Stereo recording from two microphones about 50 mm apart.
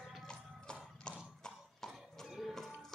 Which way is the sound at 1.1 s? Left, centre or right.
Centre.